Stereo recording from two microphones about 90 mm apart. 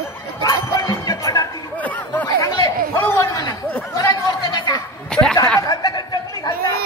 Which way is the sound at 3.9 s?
50° left (ahead or behind).